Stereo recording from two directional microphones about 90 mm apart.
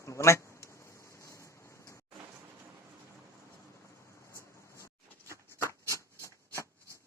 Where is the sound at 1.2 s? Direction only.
35° left (ahead or behind).